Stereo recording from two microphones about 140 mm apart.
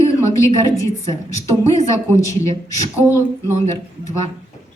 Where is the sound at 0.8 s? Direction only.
25° left (ahead or behind).